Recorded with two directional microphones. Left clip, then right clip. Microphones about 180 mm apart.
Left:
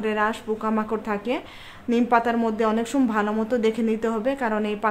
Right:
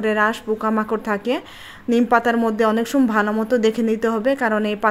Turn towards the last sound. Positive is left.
turn(degrees=-30)  # may be behind; listen again after turning